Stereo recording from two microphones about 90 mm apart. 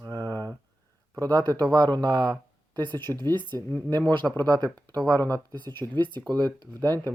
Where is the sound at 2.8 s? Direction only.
20° left (ahead or behind).